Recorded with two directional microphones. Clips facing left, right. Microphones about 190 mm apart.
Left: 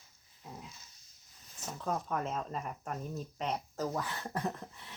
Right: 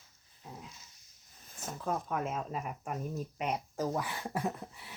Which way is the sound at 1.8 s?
5° right (ahead or behind).